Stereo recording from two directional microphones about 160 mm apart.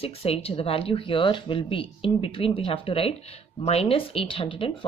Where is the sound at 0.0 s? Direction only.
40° left (ahead or behind).